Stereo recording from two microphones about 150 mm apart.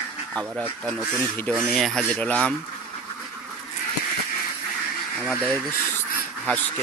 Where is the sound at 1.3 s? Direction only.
10° left (ahead or behind).